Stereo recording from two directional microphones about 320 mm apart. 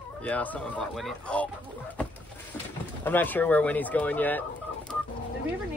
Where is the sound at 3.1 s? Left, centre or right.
Centre.